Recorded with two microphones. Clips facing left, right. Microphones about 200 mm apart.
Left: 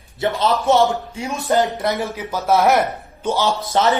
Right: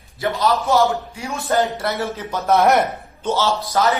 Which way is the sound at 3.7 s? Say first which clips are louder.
Left 2 dB; 25° left (ahead or behind).